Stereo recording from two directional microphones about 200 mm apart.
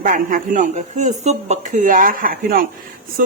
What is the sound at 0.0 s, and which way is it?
Speech, 40° right (ahead or behind).